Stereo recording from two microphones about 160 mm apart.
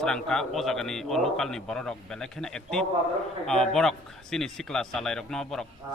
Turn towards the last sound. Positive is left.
turn(degrees=5)  # may be behind; listen again after turning